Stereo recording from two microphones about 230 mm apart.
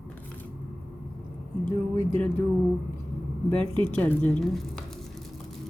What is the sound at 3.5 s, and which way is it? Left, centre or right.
Speech, right.